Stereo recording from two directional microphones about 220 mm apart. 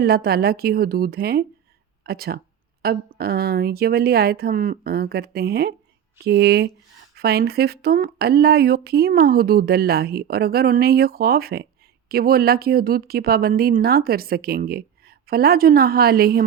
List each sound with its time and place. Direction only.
0.0 s speech: 45° right (ahead or behind)